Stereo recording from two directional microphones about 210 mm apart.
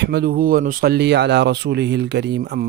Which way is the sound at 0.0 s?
50° right (ahead or behind).